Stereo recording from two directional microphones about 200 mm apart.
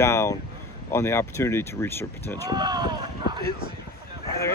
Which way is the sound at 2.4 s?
20° right (ahead or behind).